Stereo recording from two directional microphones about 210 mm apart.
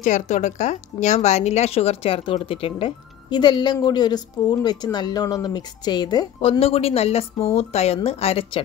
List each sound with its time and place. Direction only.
0.0 s a woman's voice: 35° left (ahead or behind)